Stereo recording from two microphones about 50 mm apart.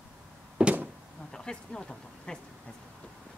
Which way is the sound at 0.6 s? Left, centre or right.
Right.